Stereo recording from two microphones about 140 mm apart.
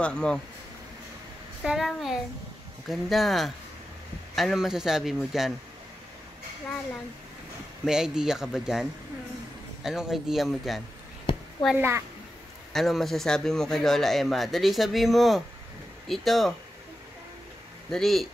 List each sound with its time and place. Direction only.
0.0 s a man's voice: 5° left (ahead or behind)
1.6 s a man's voice: 5° right (ahead or behind)
7.8 s a man's voice: 5° right (ahead or behind)
9.8 s a man's voice: 5° right (ahead or behind)
11.7 s a child's voice: 15° right (ahead or behind)
12.7 s a man's voice: centre (ahead or behind)
17.8 s a man's voice: centre (ahead or behind)